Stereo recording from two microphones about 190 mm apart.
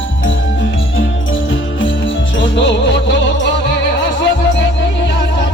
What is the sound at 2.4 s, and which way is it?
Music, 70° left (ahead or behind).